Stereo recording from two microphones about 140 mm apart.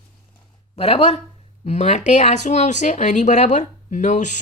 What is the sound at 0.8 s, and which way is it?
Speech, 45° left (ahead or behind).